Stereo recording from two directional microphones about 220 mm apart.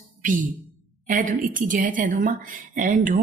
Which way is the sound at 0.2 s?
35° right (ahead or behind).